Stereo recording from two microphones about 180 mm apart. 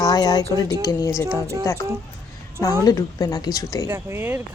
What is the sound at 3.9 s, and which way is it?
Speech, 10° right (ahead or behind).